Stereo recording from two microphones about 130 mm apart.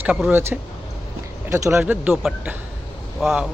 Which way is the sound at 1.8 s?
10° right (ahead or behind).